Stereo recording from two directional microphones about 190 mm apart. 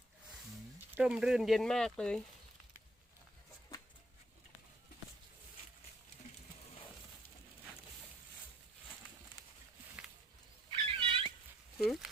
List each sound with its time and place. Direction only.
0.8 s speech: 5° right (ahead or behind)
10.7 s cat: 25° right (ahead or behind)
11.8 s a sound: centre (ahead or behind)